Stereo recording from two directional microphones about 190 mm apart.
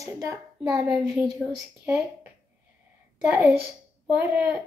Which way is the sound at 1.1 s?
Centre (ahead or behind).